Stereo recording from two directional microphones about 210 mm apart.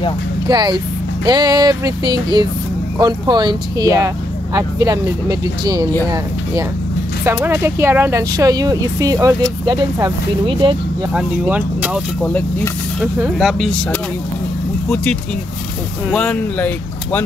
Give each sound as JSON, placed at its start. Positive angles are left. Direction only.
{"t": 0.5, "sound": "speech", "side_deg": -20}
{"t": 7.2, "sound": "speech", "side_deg": -10}
{"t": 11.1, "sound": "speech", "side_deg": -5}
{"t": 12.3, "sound": "speech", "side_deg": 5}
{"t": 16.1, "sound": "speech", "side_deg": 5}